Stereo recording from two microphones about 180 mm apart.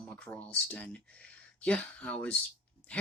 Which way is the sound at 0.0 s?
10° left (ahead or behind).